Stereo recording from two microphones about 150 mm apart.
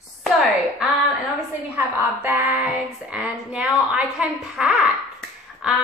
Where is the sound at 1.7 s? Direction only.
15° right (ahead or behind).